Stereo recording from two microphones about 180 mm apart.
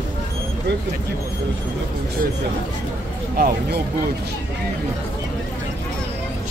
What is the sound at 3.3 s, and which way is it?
Speech, 55° right (ahead or behind).